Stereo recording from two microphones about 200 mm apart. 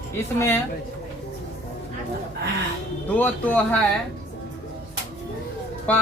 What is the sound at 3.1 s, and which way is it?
Speech, 10° left (ahead or behind).